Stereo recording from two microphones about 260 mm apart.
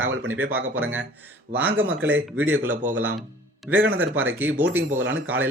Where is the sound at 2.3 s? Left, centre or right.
Centre.